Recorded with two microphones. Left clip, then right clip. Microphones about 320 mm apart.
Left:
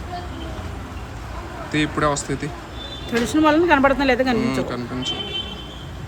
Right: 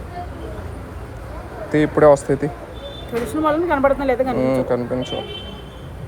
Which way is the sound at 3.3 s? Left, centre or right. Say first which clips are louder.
Left 3 dB; left.